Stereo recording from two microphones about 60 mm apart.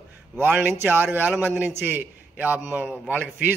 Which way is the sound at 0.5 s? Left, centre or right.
Right.